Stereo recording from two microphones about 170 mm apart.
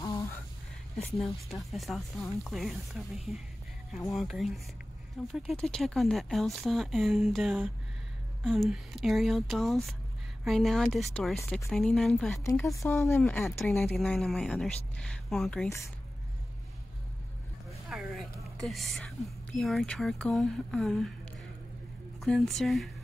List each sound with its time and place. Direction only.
0.0 s music: 20° left (ahead or behind)
1.2 s speech: centre (ahead or behind)
12.7 s speech: 15° left (ahead or behind)
13.2 s speech: centre (ahead or behind)
17.6 s speech: centre (ahead or behind)
22.2 s speech: centre (ahead or behind)